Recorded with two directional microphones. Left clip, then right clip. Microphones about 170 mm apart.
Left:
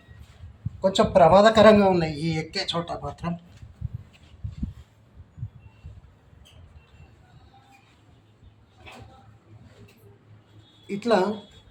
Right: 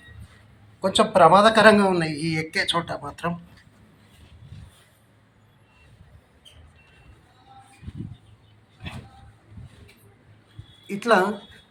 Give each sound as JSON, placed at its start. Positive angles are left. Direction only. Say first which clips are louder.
{"t": 0.8, "sound": "speech", "louder": "right 1 dB", "side_deg": 20}
{"t": 10.8, "sound": "speech", "louder": "right 3 dB", "side_deg": 10}